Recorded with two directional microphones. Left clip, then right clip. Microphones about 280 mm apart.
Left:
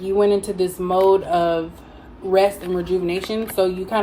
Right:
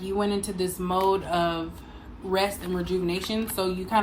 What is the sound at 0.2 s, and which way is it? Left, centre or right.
Speech, centre.